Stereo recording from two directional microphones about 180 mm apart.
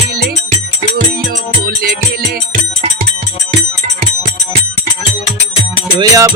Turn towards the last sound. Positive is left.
turn(degrees=-25)  # may be behind; listen again after turning